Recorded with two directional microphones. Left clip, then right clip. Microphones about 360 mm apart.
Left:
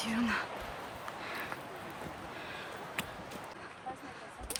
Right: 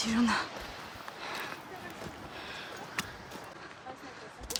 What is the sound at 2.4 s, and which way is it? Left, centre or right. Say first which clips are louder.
Sniff: right 2 dB; centre.